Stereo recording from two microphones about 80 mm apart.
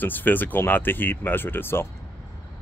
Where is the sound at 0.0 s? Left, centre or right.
Left.